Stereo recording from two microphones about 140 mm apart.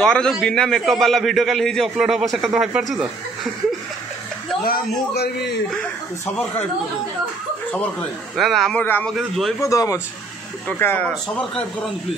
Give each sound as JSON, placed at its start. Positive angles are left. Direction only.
{"t": 0.0, "sound": "a man's voice", "side_deg": 5}
{"t": 8.4, "sound": "a man's voice", "side_deg": 0}
{"t": 8.8, "sound": "speech", "side_deg": 15}